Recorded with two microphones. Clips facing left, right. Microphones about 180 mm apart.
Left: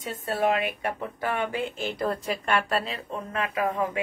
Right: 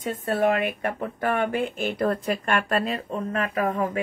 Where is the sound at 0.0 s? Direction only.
50° right (ahead or behind).